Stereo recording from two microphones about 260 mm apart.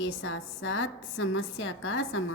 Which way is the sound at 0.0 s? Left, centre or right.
Left.